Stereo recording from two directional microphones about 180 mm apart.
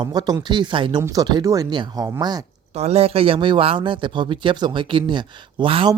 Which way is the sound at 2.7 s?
35° right (ahead or behind).